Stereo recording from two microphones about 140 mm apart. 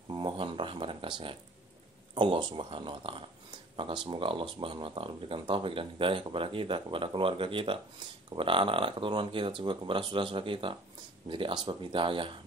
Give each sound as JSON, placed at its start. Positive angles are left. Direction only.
{"t": 0.1, "sound": "speech", "side_deg": -35}